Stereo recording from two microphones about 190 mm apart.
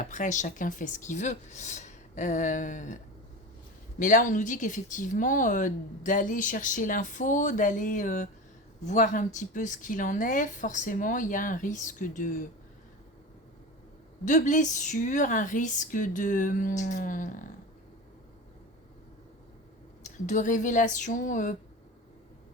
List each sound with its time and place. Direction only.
0.0 s a woman's voice: 40° left (ahead or behind)
4.0 s speech: 45° left (ahead or behind)
14.3 s a woman's voice: 40° left (ahead or behind)
20.1 s speech: 40° left (ahead or behind)